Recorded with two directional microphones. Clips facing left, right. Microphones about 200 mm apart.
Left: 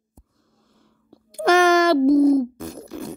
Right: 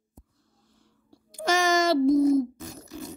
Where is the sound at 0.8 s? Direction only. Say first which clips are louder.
Left 6 dB; 60° left (ahead or behind).